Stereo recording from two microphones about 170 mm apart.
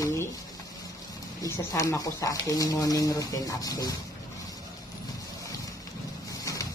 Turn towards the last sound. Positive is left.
turn(degrees=20)  # may be behind; listen again after turning